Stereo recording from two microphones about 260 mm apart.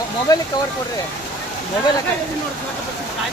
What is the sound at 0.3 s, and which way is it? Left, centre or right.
Speech, centre.